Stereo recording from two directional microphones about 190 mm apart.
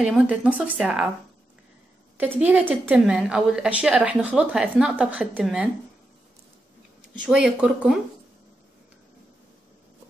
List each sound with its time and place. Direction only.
0.0 s speech: 5° right (ahead or behind)
2.1 s a woman's voice: 10° right (ahead or behind)
7.2 s speech: 5° right (ahead or behind)